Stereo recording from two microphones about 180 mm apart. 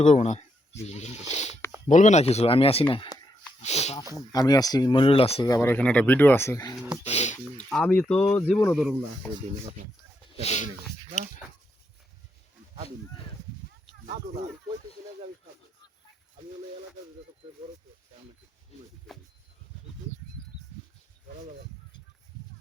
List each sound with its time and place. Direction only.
0.0 s speech: 40° left (ahead or behind)
4.3 s speech: 20° left (ahead or behind)
5.5 s speech: 10° left (ahead or behind)
7.0 s speech: 40° left (ahead or behind)
7.7 s speech: 5° left (ahead or behind)
10.3 s speech: 35° left (ahead or behind)
19.1 s speech: centre (ahead or behind)